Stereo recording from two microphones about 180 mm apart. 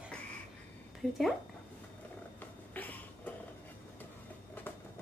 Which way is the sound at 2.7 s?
10° left (ahead or behind).